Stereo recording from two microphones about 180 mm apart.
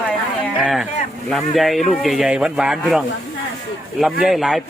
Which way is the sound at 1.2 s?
Centre (ahead or behind).